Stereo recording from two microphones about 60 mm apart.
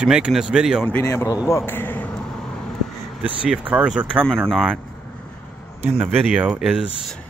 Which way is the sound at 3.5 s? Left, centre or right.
Centre.